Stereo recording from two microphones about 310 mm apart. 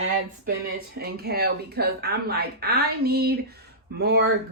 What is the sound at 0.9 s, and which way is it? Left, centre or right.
A woman's voice, right.